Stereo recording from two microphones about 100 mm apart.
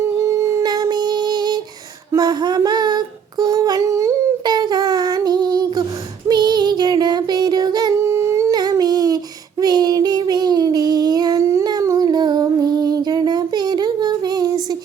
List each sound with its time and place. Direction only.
0.0 s a sound: 30° right (ahead or behind)
0.6 s female singing: 45° right (ahead or behind)
2.1 s a sound: 45° right (ahead or behind)
4.4 s child singing: 45° right (ahead or behind)
7.9 s humming: 25° right (ahead or behind)
8.5 s child singing: 45° right (ahead or behind)
11.6 s music: 35° right (ahead or behind)